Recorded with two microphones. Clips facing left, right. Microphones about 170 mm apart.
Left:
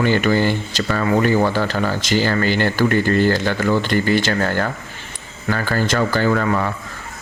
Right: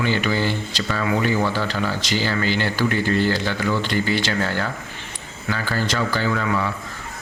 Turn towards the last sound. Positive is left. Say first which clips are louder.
# left 4 dB
turn(degrees=45)  # may be behind; listen again after turning